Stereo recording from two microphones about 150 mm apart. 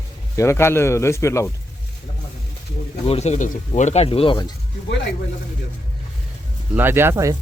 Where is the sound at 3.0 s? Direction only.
45° left (ahead or behind).